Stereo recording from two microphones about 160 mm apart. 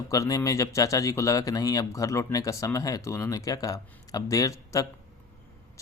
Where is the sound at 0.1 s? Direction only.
20° left (ahead or behind).